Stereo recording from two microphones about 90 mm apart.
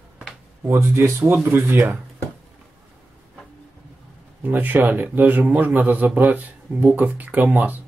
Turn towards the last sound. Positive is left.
turn(degrees=-20)  # may be behind; listen again after turning